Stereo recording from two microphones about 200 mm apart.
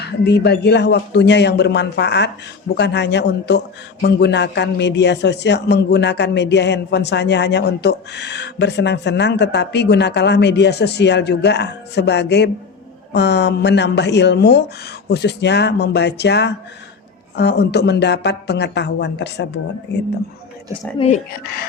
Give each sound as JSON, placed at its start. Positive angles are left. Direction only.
{"t": 0.0, "sound": "a man's voice", "side_deg": 55}
{"t": 21.3, "sound": "speech", "side_deg": 50}